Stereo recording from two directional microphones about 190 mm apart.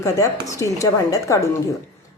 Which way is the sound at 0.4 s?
15° left (ahead or behind).